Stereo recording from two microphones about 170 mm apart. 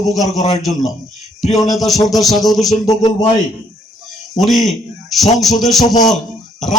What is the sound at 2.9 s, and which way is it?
Speech, 25° left (ahead or behind).